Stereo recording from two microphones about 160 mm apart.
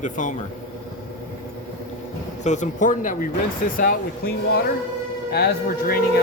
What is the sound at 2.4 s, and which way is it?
Speech, 50° left (ahead or behind).